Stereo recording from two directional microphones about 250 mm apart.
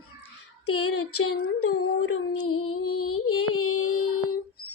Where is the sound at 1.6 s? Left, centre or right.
Left.